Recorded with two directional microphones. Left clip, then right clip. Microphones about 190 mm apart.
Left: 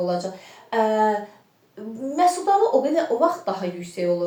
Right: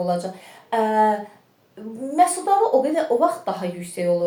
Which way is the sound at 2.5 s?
35° right (ahead or behind).